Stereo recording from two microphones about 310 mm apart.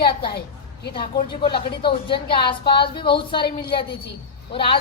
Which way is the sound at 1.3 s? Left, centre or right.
Centre.